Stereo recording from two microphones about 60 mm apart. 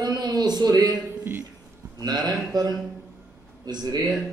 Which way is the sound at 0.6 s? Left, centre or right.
Right.